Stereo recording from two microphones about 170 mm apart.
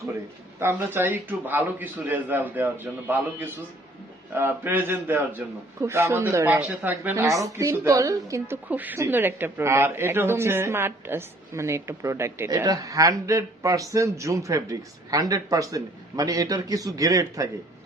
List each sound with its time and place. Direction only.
0.6 s speech: 10° right (ahead or behind)